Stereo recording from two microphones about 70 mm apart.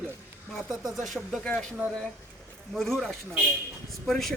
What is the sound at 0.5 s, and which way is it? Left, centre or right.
Speech, centre.